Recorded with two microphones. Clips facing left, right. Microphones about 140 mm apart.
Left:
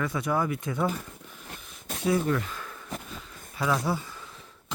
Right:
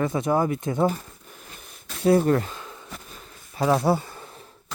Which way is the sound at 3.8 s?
60° right (ahead or behind).